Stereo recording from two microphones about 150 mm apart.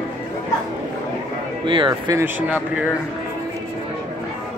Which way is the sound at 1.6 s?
35° right (ahead or behind).